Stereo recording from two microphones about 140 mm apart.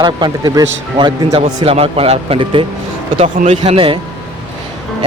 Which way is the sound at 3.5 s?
40° right (ahead or behind).